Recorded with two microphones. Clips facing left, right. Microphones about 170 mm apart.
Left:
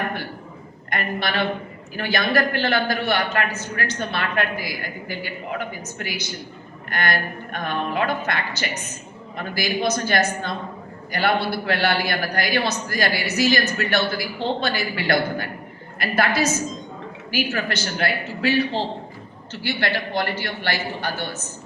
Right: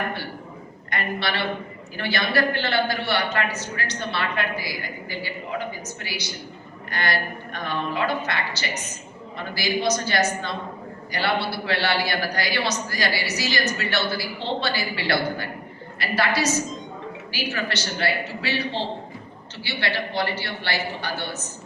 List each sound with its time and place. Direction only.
0.9 s a woman's voice: 45° left (ahead or behind)
19.6 s a man's voice: 45° left (ahead or behind)